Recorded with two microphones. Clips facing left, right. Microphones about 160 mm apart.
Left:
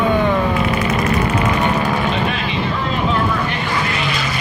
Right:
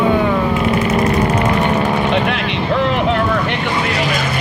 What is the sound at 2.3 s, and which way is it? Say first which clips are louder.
Vehicle: right 3 dB; 75° right (ahead or behind).